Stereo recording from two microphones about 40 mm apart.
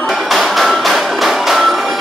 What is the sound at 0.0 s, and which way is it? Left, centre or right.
Music, centre.